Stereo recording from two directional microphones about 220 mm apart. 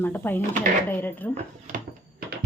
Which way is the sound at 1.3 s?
35° right (ahead or behind).